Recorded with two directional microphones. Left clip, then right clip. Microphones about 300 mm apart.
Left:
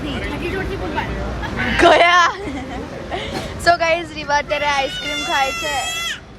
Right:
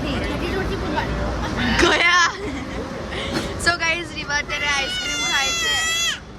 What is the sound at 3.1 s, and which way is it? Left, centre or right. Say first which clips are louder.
Speech: left 1 dB; centre.